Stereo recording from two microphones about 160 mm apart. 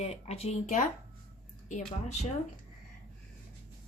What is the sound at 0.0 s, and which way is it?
Speech, 40° left (ahead or behind).